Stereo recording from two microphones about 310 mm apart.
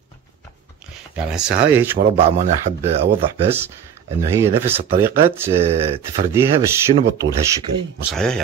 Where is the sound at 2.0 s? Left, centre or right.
Right.